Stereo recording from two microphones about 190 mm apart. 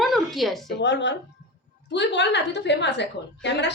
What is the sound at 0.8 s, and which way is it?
A woman's voice, 65° left (ahead or behind).